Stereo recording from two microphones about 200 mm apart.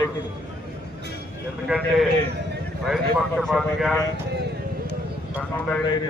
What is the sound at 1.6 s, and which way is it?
A man's voice, centre (ahead or behind).